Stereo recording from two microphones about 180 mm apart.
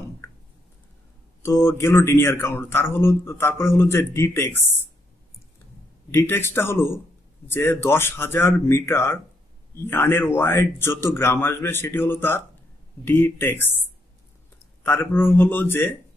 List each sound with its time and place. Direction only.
1.4 s speech: 15° left (ahead or behind)
6.1 s speech: 15° left (ahead or behind)
14.8 s speech: 10° left (ahead or behind)